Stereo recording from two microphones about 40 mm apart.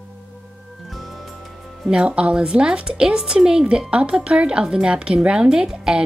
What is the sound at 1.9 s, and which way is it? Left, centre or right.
A woman's voice, right.